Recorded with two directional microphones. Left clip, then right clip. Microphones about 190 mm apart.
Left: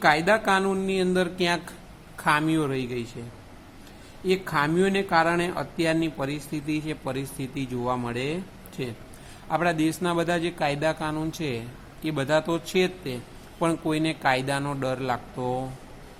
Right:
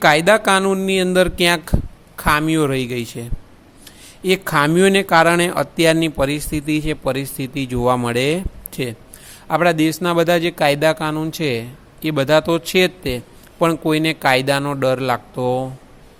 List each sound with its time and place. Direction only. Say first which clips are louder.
0.0 s speech: right 8 dB; 55° right (ahead or behind)
4.2 s speech: right 8 dB; 55° right (ahead or behind)